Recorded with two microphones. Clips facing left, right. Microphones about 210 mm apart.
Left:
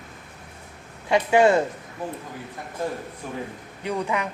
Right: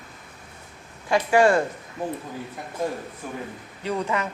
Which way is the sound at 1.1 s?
20° left (ahead or behind).